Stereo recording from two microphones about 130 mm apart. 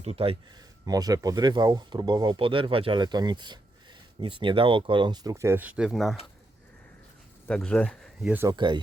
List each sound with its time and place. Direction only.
0.0 s speech: 50° right (ahead or behind)
0.5 s speech: 30° right (ahead or behind); by 6.1 s centre (ahead or behind)
7.4 s speech: 10° left (ahead or behind)
8.4 s speech: 35° right (ahead or behind)